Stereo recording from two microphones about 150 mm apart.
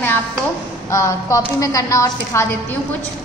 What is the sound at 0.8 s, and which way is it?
A woman's voice, 20° left (ahead or behind).